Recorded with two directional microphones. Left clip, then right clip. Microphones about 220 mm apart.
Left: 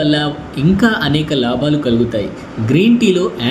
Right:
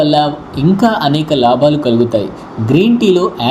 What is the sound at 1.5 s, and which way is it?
Speech, 20° left (ahead or behind).